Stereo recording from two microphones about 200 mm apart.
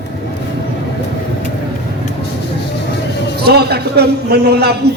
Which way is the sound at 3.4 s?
55° right (ahead or behind).